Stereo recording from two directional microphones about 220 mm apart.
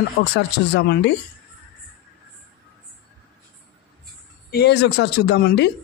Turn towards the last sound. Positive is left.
turn(degrees=50)  # may be behind; listen again after turning